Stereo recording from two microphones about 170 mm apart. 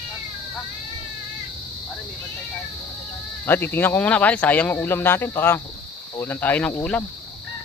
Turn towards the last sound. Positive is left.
turn(degrees=10)  # may be behind; listen again after turning